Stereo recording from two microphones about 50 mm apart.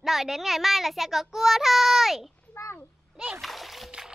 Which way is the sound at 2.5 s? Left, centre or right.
Left.